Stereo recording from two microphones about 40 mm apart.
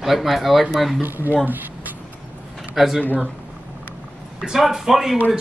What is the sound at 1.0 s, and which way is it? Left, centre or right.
Speech, right.